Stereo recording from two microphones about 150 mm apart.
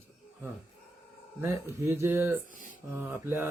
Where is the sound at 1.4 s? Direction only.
20° right (ahead or behind).